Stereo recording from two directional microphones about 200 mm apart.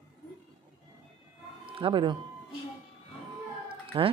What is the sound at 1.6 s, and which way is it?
Speech, 25° right (ahead or behind).